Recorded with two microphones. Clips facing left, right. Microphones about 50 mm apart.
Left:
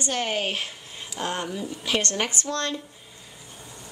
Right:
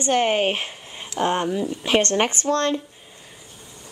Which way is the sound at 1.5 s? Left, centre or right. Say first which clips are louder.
Right 7 dB; right.